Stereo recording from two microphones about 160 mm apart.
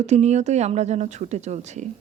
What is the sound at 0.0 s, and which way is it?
Speech, 45° right (ahead or behind).